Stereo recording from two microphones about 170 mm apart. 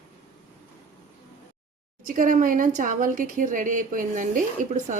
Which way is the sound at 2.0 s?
50° right (ahead or behind).